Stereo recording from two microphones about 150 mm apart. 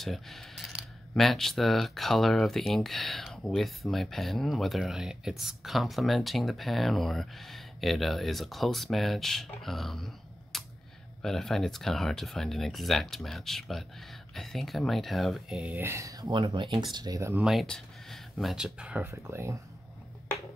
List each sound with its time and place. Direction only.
0.0 s speech: centre (ahead or behind)
15.7 s speech: 15° right (ahead or behind)
17.4 s speech: centre (ahead or behind); by 19.6 s 20° right (ahead or behind)